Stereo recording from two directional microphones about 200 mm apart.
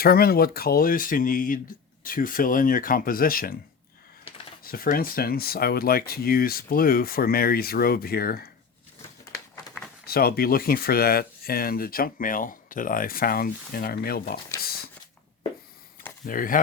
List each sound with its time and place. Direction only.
0.0 s speech: 50° left (ahead or behind)
4.6 s speech: 45° left (ahead or behind)
10.1 s speech: 50° left (ahead or behind)
16.2 s speech: 45° left (ahead or behind)